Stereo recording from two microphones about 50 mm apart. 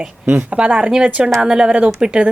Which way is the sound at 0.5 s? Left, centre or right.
Right.